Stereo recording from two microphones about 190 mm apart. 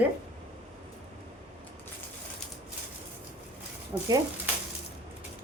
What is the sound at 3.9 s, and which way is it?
Speech, 20° right (ahead or behind).